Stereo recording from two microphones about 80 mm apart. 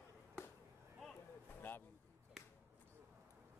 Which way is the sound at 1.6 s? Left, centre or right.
Left.